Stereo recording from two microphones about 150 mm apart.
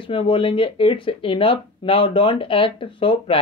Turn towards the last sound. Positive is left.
turn(degrees=35)  # may be behind; listen again after turning